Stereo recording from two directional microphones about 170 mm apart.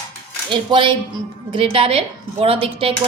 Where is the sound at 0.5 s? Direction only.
30° right (ahead or behind).